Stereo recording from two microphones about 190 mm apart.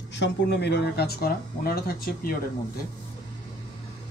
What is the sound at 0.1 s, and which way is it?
Speech, 65° left (ahead or behind).